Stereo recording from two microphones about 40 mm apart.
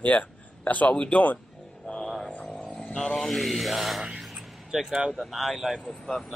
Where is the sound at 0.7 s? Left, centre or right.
Left.